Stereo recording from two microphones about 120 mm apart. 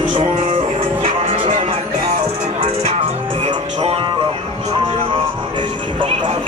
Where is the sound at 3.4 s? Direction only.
50° right (ahead or behind).